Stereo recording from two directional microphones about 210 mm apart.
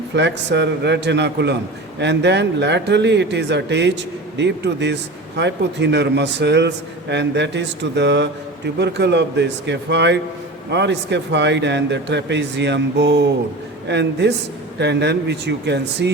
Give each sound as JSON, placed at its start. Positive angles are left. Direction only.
{"t": 0.1, "sound": "a man's voice", "side_deg": -55}